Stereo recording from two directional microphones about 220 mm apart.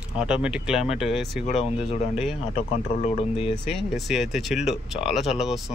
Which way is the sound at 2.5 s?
30° left (ahead or behind).